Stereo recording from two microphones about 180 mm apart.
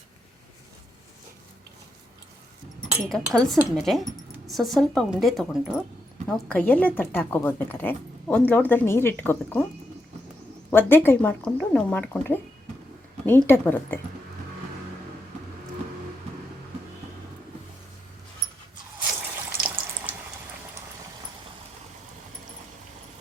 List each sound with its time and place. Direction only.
3.1 s a woman's voice: centre (ahead or behind)
10.7 s speech: 10° left (ahead or behind)
19.5 s water tap: 10° right (ahead or behind)